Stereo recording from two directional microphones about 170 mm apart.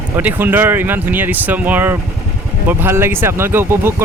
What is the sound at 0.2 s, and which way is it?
Speech, 10° right (ahead or behind).